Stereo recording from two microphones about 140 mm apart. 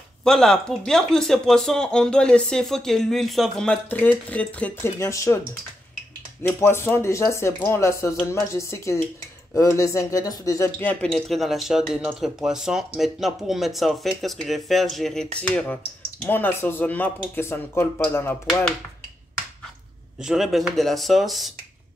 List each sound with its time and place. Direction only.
0.2 s speech: 5° left (ahead or behind)
4.9 s speech: 20° left (ahead or behind)
6.4 s speech: 15° left (ahead or behind)
20.2 s speech: 5° right (ahead or behind)